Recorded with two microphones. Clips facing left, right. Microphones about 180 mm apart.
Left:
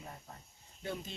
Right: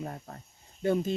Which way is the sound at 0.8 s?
50° right (ahead or behind).